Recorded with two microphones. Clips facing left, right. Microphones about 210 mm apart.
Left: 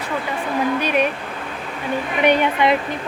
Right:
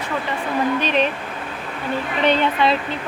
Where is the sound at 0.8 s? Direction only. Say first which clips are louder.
Left 1 dB; 10° left (ahead or behind).